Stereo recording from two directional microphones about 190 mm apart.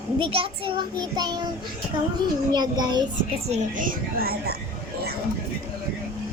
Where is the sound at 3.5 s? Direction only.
45° right (ahead or behind).